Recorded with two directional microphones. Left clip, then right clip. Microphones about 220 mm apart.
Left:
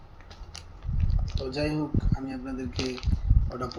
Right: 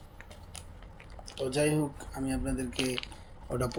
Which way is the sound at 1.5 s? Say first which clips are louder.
Right 1 dB; 45° right (ahead or behind).